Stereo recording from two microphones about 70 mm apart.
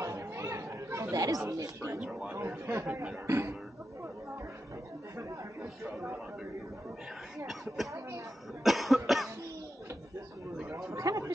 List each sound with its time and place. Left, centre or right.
0.0 s chatter: right
1.1 s speech: right
2.0 s speech: centre
2.3 s a man's voice: right
2.9 s speech: centre
3.3 s a sound: right
7.4 s speech: centre
8.6 s cough: centre
10.9 s a sound: right